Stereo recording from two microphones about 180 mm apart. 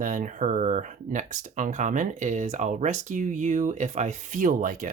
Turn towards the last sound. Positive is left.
turn(degrees=-45)  # may be behind; listen again after turning